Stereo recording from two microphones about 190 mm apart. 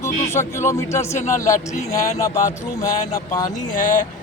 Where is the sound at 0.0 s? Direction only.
15° left (ahead or behind).